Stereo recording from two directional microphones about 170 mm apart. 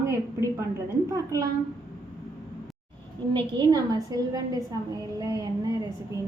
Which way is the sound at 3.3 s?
25° right (ahead or behind).